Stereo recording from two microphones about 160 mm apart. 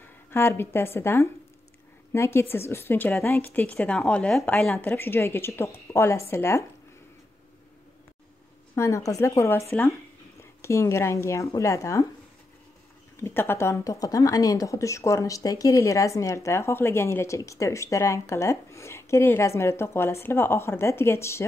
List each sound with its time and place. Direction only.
0.0 s a woman's voice: 15° left (ahead or behind)
8.7 s a woman's voice: 20° left (ahead or behind)
13.2 s a woman's voice: 15° left (ahead or behind)